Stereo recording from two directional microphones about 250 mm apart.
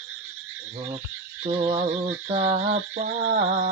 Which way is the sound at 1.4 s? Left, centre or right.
Right.